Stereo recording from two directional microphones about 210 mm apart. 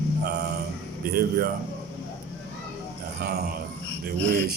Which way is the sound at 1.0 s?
45° right (ahead or behind).